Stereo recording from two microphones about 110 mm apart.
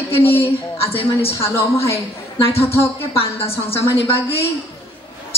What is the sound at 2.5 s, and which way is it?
Speech, 60° left (ahead or behind).